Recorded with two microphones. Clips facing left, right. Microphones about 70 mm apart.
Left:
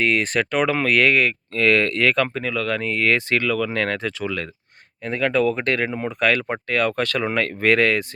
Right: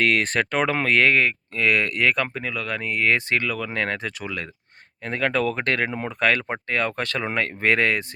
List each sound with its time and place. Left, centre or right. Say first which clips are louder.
0.0 s speech: left 1 dB; right
1.5 s speech: left 4 dB; centre
5.0 s speech: left 3 dB; right
6.5 s speech: left 3 dB; right